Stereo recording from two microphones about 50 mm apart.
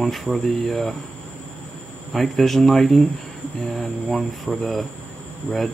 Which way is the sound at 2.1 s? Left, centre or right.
Centre.